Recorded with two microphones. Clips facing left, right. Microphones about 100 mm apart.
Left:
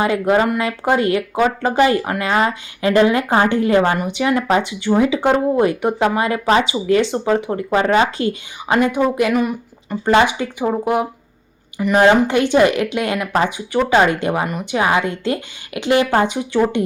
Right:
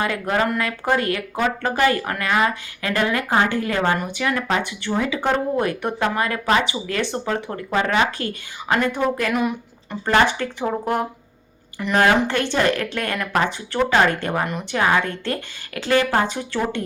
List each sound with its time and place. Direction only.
0.0 s speech: 20° left (ahead or behind)
9.3 s speech: centre (ahead or behind)
10.1 s speech: 15° left (ahead or behind)